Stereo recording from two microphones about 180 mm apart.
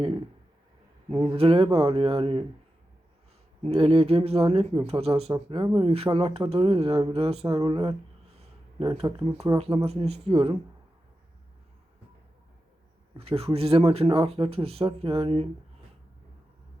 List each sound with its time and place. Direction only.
1.3 s speech: 30° right (ahead or behind)
3.6 s speech: 35° right (ahead or behind)
8.4 s a sound: 30° right (ahead or behind)
9.0 s speech: 20° right (ahead or behind)
9.8 s speech: 35° right (ahead or behind)
13.1 s speech: 35° right (ahead or behind)